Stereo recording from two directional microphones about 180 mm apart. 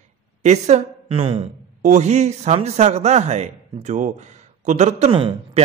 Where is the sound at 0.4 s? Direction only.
40° right (ahead or behind).